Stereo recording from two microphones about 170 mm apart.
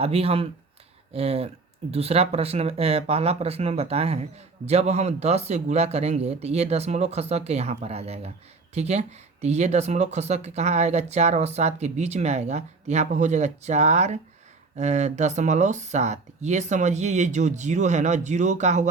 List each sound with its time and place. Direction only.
0.0 s speech: 35° right (ahead or behind)